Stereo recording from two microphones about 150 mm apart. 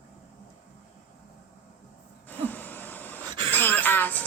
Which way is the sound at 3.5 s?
10° left (ahead or behind).